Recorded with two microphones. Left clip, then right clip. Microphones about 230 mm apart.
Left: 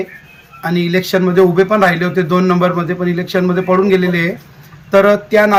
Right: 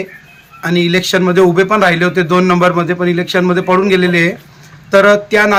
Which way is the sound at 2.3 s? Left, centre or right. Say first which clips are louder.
Right 3 dB; right.